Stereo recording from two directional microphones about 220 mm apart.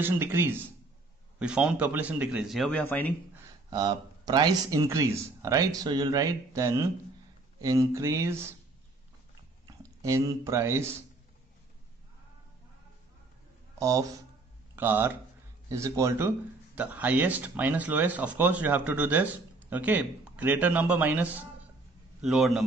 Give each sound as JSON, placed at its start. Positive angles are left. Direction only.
{"t": 0.0, "sound": "a man's voice", "side_deg": -10}
{"t": 3.7, "sound": "speech", "side_deg": -20}
{"t": 10.0, "sound": "speech", "side_deg": -15}
{"t": 13.7, "sound": "a man's voice", "side_deg": -15}